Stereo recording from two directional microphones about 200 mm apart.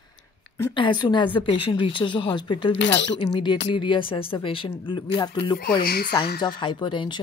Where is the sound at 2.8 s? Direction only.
60° left (ahead or behind).